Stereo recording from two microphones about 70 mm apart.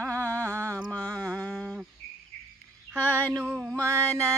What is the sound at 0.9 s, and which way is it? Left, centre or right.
Music, centre.